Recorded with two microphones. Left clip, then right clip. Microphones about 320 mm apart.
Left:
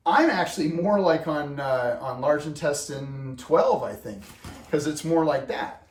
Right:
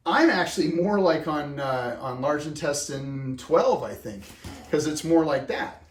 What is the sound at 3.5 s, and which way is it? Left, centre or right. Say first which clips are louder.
Speech: left 1 dB; left.